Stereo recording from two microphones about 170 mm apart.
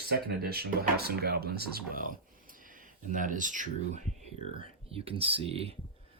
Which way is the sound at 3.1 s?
50° right (ahead or behind).